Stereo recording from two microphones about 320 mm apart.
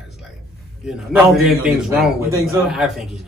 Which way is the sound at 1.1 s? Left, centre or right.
Centre.